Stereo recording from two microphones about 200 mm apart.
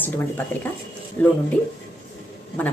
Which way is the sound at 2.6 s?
10° left (ahead or behind).